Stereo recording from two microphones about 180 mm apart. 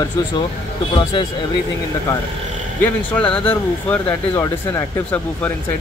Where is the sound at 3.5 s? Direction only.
10° left (ahead or behind).